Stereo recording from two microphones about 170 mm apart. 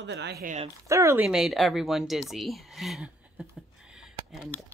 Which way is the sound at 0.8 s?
15° right (ahead or behind).